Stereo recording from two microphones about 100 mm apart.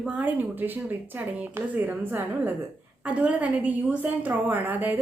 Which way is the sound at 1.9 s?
20° right (ahead or behind).